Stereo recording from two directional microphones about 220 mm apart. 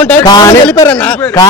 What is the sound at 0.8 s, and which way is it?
Speech, 5° left (ahead or behind).